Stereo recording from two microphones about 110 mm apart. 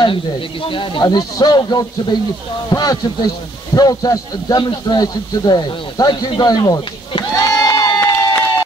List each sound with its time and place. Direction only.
0.0 s a man's voice: 50° left (ahead or behind); by 6.8 s 35° left (ahead or behind)
7.3 s crowd: 30° left (ahead or behind)